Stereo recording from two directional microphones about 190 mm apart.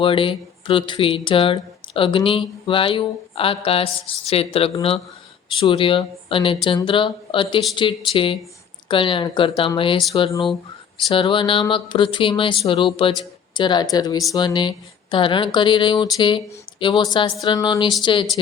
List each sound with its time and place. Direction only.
0.0 s speech: 25° left (ahead or behind)
11.1 s speech: 25° left (ahead or behind)